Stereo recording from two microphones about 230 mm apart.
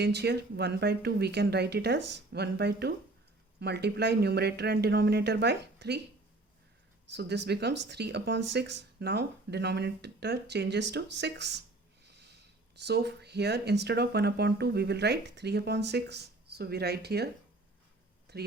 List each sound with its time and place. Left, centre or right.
0.0 s speech: right
7.1 s speech: right
12.0 s snort: right
12.8 s speech: right
18.3 s speech: right